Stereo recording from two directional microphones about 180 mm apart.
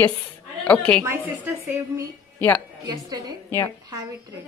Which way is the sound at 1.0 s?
15° right (ahead or behind).